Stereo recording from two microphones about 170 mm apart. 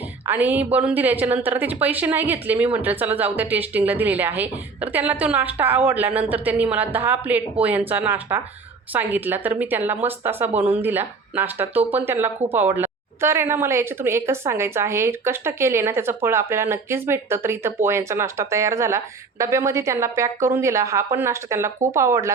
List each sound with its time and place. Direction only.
0.3 s speech: 10° right (ahead or behind)